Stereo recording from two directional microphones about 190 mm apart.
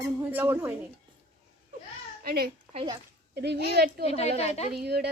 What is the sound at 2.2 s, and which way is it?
Speech, 50° right (ahead or behind).